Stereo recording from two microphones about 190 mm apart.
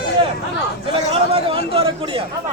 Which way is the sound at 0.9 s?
30° right (ahead or behind).